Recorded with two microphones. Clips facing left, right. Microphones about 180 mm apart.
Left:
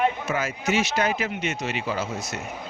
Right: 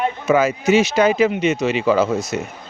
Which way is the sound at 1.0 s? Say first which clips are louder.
Right 10 dB; 90° right.